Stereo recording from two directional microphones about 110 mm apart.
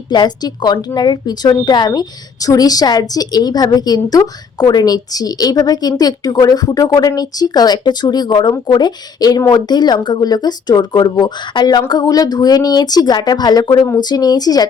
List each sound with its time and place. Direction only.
0.1 s a woman's voice: 40° left (ahead or behind)